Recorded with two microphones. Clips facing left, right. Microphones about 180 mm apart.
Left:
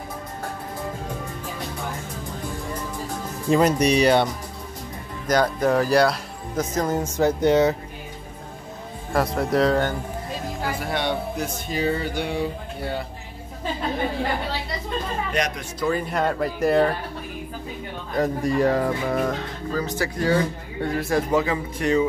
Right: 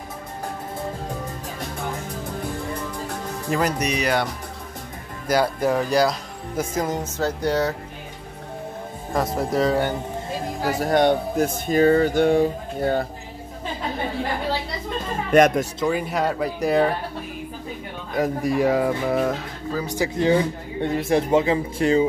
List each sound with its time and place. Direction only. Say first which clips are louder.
3.4 s speech: left 5 dB; 25° left (ahead or behind)
5.3 s speech: left 1 dB; 5° right (ahead or behind)
7.2 s speech: left 5 dB; 20° left (ahead or behind)
9.1 s speech: left 1 dB; centre (ahead or behind)
10.6 s speech: right 8 dB; 40° right (ahead or behind)
15.3 s speech: right 13 dB; 50° right (ahead or behind)
15.9 s speech: left 3 dB; 5° right (ahead or behind)
18.1 s speech: even; 10° right (ahead or behind); by 22.0 s 30° right (ahead or behind)